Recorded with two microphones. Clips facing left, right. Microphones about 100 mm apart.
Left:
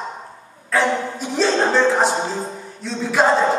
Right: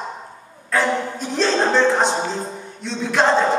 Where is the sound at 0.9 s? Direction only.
5° left (ahead or behind).